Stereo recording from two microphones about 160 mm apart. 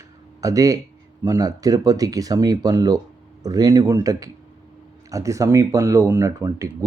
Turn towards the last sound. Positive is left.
turn(degrees=-20)  # may be behind; listen again after turning